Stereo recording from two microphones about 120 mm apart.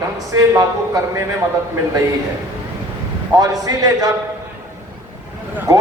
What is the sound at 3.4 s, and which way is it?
Speech, 30° right (ahead or behind).